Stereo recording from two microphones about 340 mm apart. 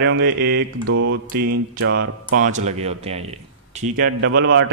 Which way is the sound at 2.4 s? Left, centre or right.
Centre.